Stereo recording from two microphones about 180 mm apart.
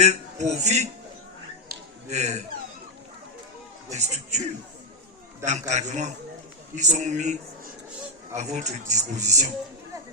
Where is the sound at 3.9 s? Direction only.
40° right (ahead or behind).